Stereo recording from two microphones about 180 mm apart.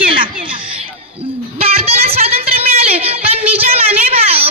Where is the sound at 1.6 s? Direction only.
35° right (ahead or behind).